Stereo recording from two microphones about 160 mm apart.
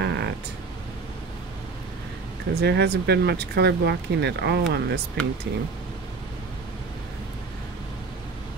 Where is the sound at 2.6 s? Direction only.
90° right.